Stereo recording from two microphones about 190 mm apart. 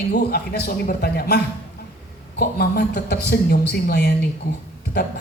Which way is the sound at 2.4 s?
55° left (ahead or behind).